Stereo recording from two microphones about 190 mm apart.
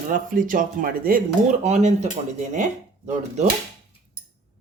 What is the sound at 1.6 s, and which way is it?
Speech, 35° right (ahead or behind).